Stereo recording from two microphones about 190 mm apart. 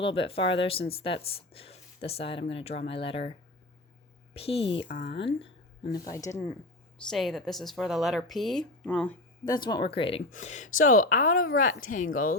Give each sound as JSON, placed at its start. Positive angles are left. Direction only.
{"t": 0.0, "sound": "speech", "side_deg": 30}
{"t": 4.4, "sound": "speech", "side_deg": 30}
{"t": 7.1, "sound": "speech", "side_deg": 0}
{"t": 9.5, "sound": "speech", "side_deg": 20}